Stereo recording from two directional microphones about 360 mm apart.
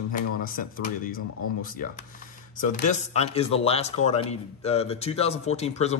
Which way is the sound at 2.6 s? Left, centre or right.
Left.